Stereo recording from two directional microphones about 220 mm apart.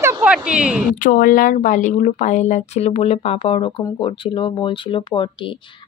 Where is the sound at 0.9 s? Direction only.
40° left (ahead or behind).